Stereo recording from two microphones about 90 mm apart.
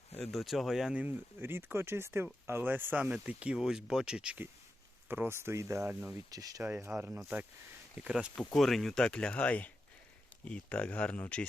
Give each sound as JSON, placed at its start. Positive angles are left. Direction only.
{"t": 0.2, "sound": "speech", "side_deg": 0}
{"t": 1.0, "sound": "speech", "side_deg": -25}
{"t": 5.0, "sound": "speech", "side_deg": -25}
{"t": 6.3, "sound": "speech", "side_deg": -40}
{"t": 6.9, "sound": "speech", "side_deg": -5}
{"t": 8.4, "sound": "speech", "side_deg": 0}